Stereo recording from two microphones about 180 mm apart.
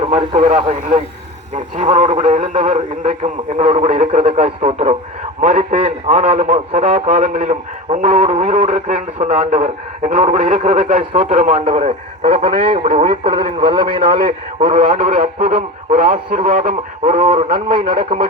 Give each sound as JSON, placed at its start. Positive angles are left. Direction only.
{"t": 0.1, "sound": "a man's voice", "side_deg": -35}
{"t": 1.5, "sound": "a man's voice", "side_deg": -45}
{"t": 3.6, "sound": "a man's voice", "side_deg": -30}
{"t": 11.1, "sound": "a man's voice", "side_deg": -30}
{"t": 12.9, "sound": "a man's voice", "side_deg": -45}
{"t": 13.2, "sound": "speech", "side_deg": -25}
{"t": 14.0, "sound": "a man's voice", "side_deg": -50}
{"t": 17.7, "sound": "speech", "side_deg": -25}